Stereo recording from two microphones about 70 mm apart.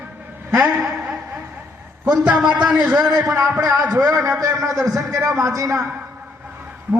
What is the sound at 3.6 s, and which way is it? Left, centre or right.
Speech, right.